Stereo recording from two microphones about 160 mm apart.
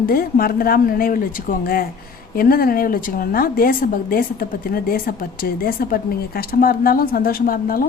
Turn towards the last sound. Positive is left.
turn(degrees=65)  # may be behind; listen again after turning